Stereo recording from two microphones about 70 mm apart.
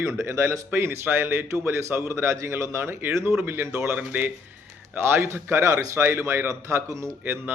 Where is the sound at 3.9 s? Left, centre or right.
Right.